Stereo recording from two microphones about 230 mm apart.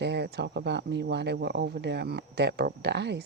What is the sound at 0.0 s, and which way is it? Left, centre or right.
Speech, right.